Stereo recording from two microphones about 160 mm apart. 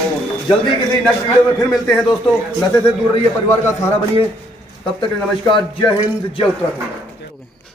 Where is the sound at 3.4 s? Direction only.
15° left (ahead or behind).